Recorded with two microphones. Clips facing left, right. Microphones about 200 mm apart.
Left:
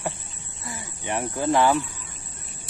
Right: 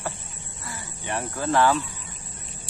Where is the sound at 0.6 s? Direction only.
20° left (ahead or behind).